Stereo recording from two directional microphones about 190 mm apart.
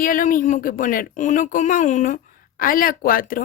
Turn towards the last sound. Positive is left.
turn(degrees=50)  # may be behind; listen again after turning